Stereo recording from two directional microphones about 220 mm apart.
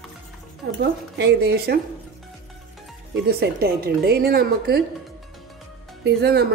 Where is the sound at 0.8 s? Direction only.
50° right (ahead or behind).